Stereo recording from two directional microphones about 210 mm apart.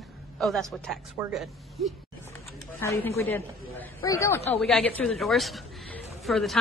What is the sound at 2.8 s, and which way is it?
A woman's voice, 10° left (ahead or behind).